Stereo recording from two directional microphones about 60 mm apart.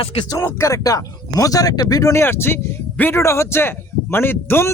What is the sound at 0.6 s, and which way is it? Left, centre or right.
Speech, left.